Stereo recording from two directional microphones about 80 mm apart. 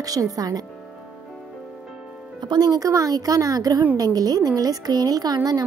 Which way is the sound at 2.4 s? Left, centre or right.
Right.